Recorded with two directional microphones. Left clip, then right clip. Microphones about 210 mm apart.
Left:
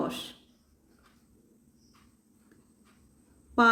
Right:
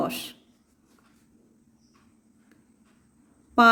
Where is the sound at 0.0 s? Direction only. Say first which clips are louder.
Right 4 dB; 40° right (ahead or behind).